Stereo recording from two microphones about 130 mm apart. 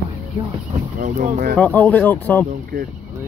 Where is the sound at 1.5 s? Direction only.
10° left (ahead or behind).